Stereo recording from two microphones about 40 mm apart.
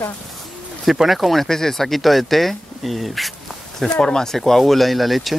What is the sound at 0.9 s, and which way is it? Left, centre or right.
Speech, centre.